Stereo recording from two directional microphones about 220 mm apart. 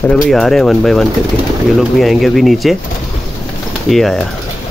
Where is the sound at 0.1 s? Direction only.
Centre (ahead or behind).